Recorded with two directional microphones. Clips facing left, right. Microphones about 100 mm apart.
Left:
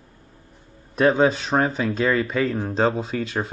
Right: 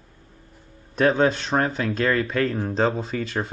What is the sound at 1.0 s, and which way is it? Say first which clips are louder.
Speech: left 1 dB; centre (ahead or behind).